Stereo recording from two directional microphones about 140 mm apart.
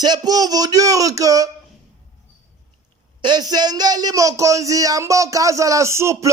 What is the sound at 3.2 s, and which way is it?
Speech, 30° right (ahead or behind).